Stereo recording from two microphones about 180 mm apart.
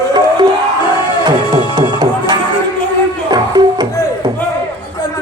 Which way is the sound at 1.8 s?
25° right (ahead or behind).